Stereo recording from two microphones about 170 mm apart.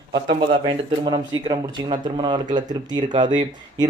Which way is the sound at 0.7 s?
30° right (ahead or behind).